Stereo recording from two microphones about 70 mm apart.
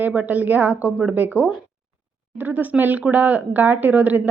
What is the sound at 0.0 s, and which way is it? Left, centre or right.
Speech, right.